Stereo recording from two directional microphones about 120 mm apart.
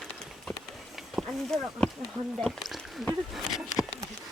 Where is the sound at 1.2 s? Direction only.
Centre (ahead or behind).